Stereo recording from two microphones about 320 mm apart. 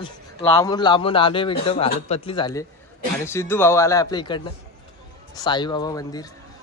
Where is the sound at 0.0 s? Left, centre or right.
Centre.